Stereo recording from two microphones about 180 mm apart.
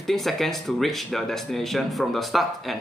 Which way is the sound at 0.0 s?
Centre (ahead or behind).